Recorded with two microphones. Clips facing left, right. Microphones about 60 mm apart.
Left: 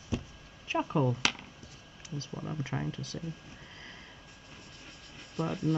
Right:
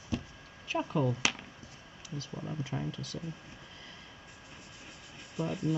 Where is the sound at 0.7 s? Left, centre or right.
Left.